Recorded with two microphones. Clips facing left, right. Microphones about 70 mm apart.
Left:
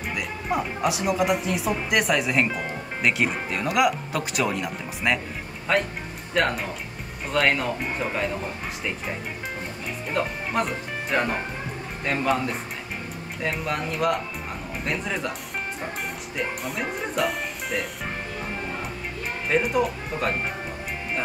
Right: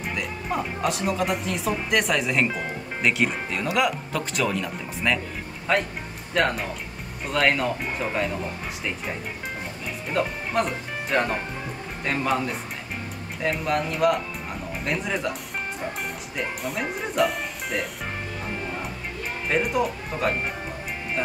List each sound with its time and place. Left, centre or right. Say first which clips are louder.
0.0 s speech: even; centre
10.1 s speech: right 1 dB; centre
13.4 s speech: right 3 dB; centre
16.3 s speech: even; centre
19.5 s speech: left 1 dB; centre